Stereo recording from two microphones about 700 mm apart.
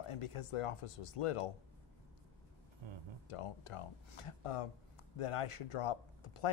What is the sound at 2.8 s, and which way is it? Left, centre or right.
Speech, right.